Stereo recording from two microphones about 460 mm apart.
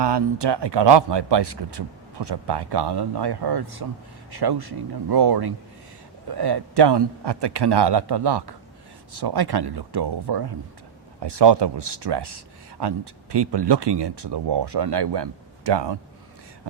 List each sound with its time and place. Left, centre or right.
0.0 s speech: right